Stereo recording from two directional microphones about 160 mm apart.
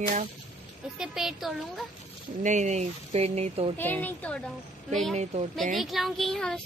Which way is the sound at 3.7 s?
10° left (ahead or behind).